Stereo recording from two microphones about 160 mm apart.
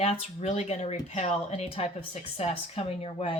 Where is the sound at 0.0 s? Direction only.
35° left (ahead or behind).